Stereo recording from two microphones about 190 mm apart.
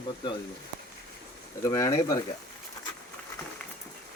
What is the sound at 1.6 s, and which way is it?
Speech, 15° left (ahead or behind).